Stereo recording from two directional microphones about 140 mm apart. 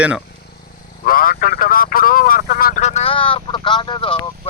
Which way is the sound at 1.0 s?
90° left.